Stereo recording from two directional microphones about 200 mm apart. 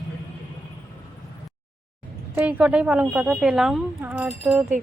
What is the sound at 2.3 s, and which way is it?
Speech, 10° right (ahead or behind).